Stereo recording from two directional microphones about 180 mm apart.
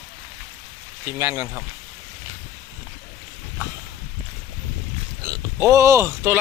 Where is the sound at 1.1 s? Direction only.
15° right (ahead or behind).